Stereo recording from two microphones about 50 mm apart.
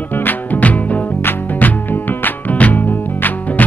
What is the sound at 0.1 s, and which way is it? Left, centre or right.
Music, left.